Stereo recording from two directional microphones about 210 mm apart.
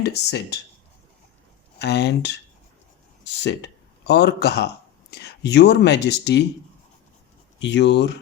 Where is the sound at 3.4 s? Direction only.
55° left (ahead or behind).